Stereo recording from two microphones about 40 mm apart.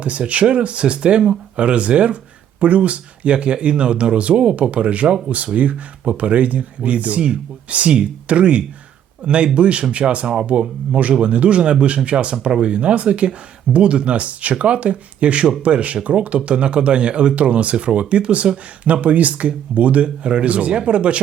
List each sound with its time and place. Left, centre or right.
0.0 s speech: right